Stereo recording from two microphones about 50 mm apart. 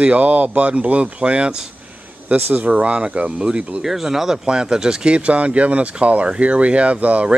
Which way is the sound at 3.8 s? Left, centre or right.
Centre.